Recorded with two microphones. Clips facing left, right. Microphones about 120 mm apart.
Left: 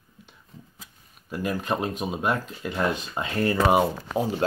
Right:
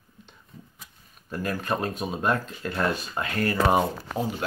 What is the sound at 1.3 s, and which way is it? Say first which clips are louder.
Speech: left 1 dB; 15° left (ahead or behind).